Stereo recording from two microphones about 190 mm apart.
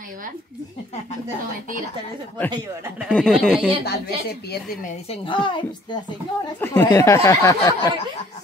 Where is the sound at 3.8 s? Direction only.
55° left (ahead or behind).